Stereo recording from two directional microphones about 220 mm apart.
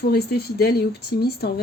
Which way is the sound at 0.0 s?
45° left (ahead or behind).